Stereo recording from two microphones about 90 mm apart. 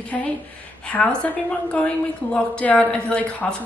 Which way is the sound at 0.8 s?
15° left (ahead or behind).